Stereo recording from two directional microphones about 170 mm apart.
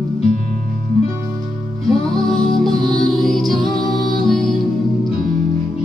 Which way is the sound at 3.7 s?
30° left (ahead or behind).